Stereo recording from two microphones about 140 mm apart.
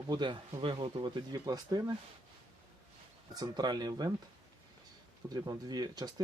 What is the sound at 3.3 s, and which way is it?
Speech, 30° right (ahead or behind).